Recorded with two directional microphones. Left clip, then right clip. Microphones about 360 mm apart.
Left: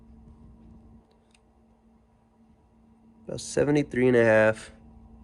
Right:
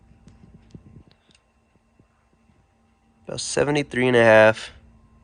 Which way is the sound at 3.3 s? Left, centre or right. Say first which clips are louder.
Right 3 dB; centre.